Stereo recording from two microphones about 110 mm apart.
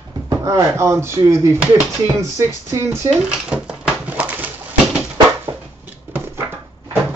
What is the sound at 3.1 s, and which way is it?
Dishes, 10° right (ahead or behind).